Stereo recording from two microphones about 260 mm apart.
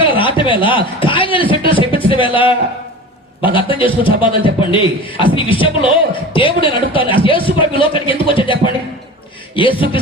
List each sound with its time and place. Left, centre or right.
0.0 s a man's voice: centre